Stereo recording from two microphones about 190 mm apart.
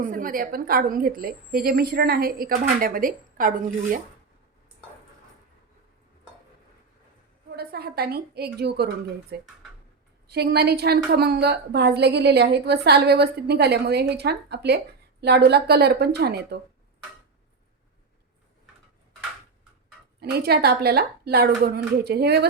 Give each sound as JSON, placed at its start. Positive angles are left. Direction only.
{"t": 0.0, "sound": "a woman's voice", "side_deg": -45}
{"t": 7.5, "sound": "a woman's voice", "side_deg": -55}
{"t": 20.3, "sound": "a woman's voice", "side_deg": -55}